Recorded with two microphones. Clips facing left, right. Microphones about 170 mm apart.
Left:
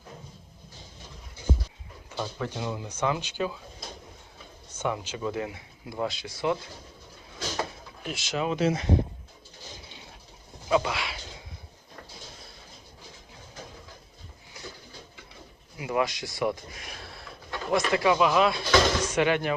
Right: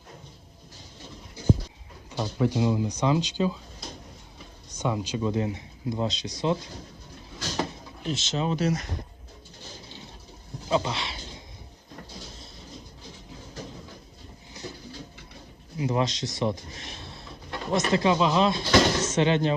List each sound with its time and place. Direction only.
2.1 s speech: 15° right (ahead or behind)
4.7 s speech: 15° right (ahead or behind)
8.0 s speech: 25° right (ahead or behind)
8.5 s speech: 40° right (ahead or behind)
10.7 s speech: 25° right (ahead or behind)
15.8 s speech: 25° right (ahead or behind)